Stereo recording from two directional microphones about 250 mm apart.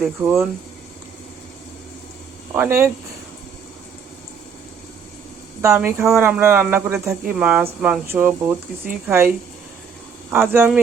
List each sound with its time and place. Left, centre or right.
0.0 s speech: centre
2.5 s speech: centre
5.6 s speech: centre
10.3 s speech: centre